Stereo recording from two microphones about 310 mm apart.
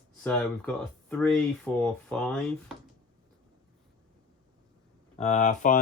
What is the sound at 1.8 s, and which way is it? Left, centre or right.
Speech, centre.